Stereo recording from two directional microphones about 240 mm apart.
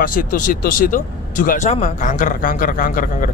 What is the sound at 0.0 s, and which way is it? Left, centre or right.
Speech, left.